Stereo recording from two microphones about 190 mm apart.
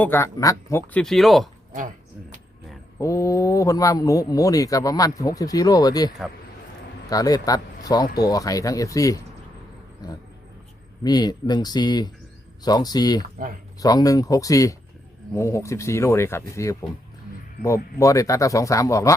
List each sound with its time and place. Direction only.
0.0 s a man's voice: 10° left (ahead or behind)
1.0 s speech: centre (ahead or behind)
3.0 s a man's voice: 15° left (ahead or behind)
11.0 s a man's voice: 20° left (ahead or behind)
18.0 s a man's voice: 15° left (ahead or behind)